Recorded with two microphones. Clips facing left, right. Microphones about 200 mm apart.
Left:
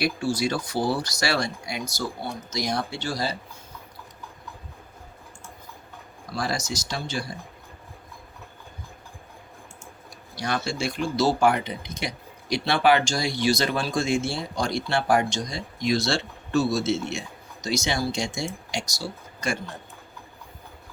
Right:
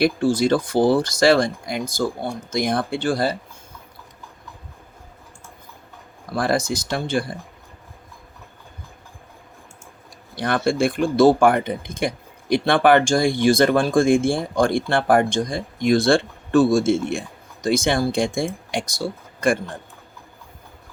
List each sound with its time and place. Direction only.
0.0 s speech: 55° right (ahead or behind)
6.3 s speech: 55° right (ahead or behind)
10.3 s speech: 55° right (ahead or behind)